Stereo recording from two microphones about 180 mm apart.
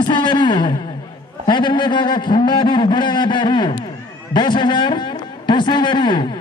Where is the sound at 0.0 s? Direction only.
25° left (ahead or behind).